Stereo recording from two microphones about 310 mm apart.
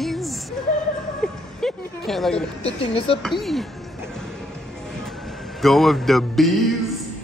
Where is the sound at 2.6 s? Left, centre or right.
Centre.